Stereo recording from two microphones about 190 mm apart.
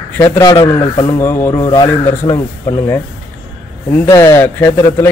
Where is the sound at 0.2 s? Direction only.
20° left (ahead or behind).